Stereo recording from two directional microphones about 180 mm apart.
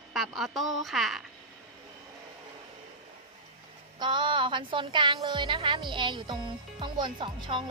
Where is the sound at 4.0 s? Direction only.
25° right (ahead or behind).